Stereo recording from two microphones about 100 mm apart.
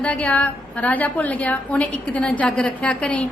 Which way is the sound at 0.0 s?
15° left (ahead or behind).